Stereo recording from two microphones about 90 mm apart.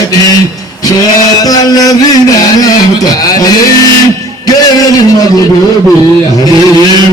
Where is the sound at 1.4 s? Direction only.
45° left (ahead or behind).